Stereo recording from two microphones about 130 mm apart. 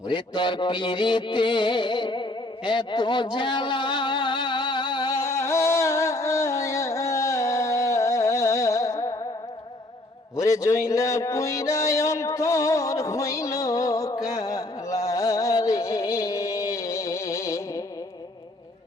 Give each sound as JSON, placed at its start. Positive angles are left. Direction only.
{"t": 0.1, "sound": "music", "side_deg": 40}
{"t": 5.1, "sound": "music", "side_deg": 20}
{"t": 10.3, "sound": "a sound", "side_deg": 25}